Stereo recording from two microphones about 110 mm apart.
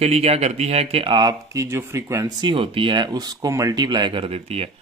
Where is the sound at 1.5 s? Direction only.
25° right (ahead or behind).